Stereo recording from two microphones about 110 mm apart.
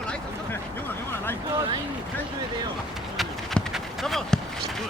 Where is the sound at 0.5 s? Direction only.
20° left (ahead or behind).